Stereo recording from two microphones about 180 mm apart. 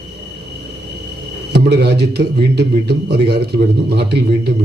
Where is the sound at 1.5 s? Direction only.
65° right (ahead or behind).